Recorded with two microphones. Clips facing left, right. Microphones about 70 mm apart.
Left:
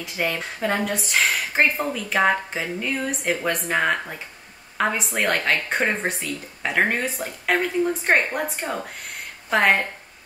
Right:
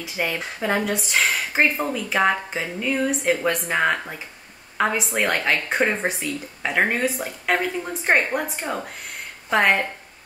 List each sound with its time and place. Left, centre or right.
0.0 s speech: centre